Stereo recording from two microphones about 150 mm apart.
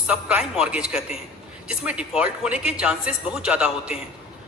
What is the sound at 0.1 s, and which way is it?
A woman's voice, 5° right (ahead or behind).